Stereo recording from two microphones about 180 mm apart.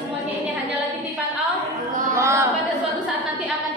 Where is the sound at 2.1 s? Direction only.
15° right (ahead or behind).